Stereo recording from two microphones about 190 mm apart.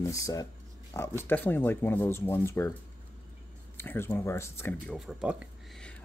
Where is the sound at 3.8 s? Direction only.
10° left (ahead or behind); by 5.8 s 5° right (ahead or behind).